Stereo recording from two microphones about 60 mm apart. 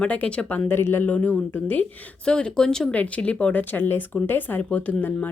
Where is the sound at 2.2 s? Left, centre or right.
Centre.